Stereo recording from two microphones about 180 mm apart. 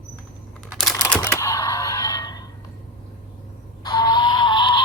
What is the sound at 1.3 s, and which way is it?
Camera, 15° left (ahead or behind).